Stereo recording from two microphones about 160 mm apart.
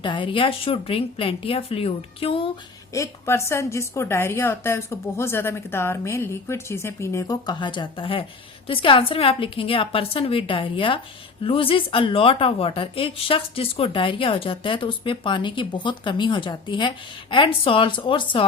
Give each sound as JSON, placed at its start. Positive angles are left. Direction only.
{"t": 0.0, "sound": "speech", "side_deg": 30}
{"t": 2.9, "sound": "a woman's voice", "side_deg": 20}